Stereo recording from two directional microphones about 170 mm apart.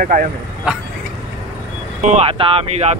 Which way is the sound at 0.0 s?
55° right (ahead or behind).